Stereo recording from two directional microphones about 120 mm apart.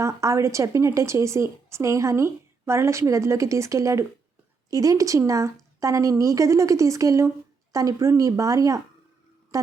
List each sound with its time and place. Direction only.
0.0 s a woman's voice: 25° right (ahead or behind)